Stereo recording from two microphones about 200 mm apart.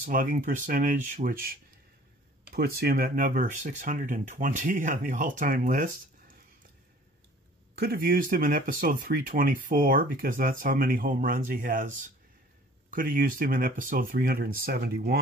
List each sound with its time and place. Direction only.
0.0 s speech: 45° right (ahead or behind)
7.8 s speech: 45° right (ahead or behind)
12.9 s speech: 45° right (ahead or behind)